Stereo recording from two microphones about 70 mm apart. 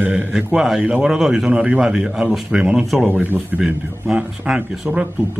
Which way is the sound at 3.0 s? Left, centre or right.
Right.